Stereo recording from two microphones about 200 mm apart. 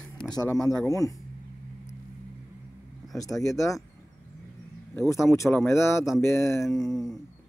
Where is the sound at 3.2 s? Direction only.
15° left (ahead or behind).